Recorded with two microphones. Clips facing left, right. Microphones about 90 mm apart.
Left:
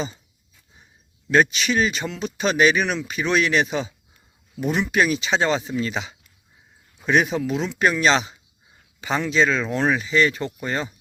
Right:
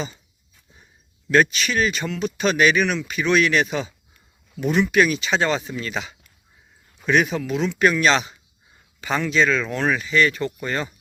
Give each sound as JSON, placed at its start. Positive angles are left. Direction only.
{"t": 1.3, "sound": "speech", "side_deg": 20}